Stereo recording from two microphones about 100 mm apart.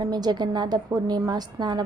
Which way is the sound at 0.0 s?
40° right (ahead or behind).